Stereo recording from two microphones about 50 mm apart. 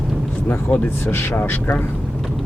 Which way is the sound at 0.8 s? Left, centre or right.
Left.